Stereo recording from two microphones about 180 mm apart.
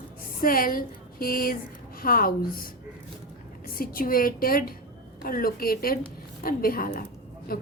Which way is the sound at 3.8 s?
55° left (ahead or behind).